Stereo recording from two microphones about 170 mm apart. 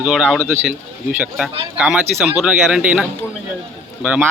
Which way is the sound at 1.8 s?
Centre (ahead or behind).